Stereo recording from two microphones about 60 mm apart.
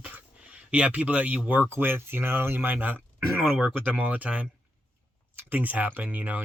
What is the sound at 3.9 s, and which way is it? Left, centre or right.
Speech, right.